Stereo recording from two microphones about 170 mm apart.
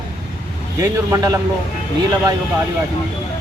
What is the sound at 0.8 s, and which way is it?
Speech, 20° right (ahead or behind).